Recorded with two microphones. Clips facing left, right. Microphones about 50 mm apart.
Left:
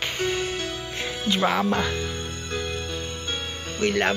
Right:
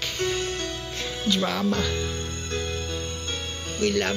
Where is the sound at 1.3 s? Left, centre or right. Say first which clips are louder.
Left 2 dB; left.